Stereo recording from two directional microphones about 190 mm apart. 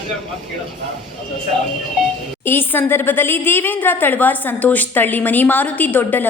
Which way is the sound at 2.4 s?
10° left (ahead or behind).